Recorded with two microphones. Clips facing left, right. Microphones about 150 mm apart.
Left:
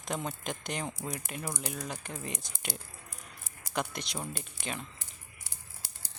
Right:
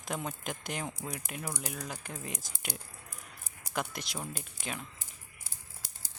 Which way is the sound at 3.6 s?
5° right (ahead or behind).